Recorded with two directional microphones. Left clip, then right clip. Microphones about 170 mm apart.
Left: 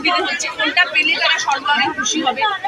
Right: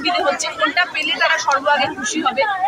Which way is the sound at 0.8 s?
10° right (ahead or behind).